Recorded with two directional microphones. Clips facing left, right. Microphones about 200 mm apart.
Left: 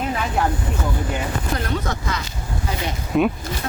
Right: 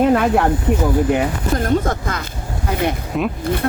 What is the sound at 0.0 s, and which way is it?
Speech, 60° right (ahead or behind).